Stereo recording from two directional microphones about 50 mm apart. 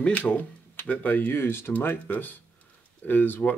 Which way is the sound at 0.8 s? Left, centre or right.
Left.